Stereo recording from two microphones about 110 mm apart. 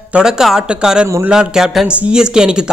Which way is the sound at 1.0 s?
20° right (ahead or behind).